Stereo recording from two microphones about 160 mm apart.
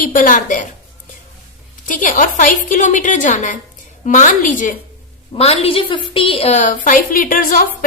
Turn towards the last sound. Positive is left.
turn(degrees=60)  # may be behind; listen again after turning